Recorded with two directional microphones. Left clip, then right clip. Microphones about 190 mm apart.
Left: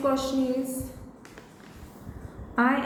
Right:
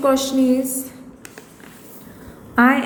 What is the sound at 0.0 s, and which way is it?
Speech, 40° right (ahead or behind).